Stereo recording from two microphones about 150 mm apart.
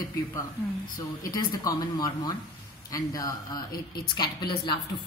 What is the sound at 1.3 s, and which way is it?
A woman's voice, 25° left (ahead or behind).